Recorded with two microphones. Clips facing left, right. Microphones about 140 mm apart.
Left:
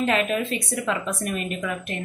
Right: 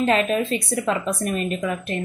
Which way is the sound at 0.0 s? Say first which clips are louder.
Right 3 dB; 35° right (ahead or behind).